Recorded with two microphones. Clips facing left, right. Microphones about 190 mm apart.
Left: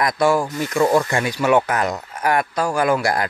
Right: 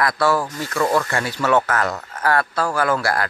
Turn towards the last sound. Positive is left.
turn(degrees=20)  # may be behind; listen again after turning